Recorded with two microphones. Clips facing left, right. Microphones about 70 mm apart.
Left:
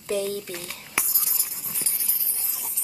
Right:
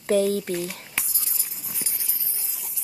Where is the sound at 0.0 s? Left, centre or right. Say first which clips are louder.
Right 6 dB; right.